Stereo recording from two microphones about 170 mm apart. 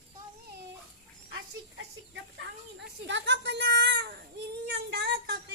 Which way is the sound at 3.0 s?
90° right.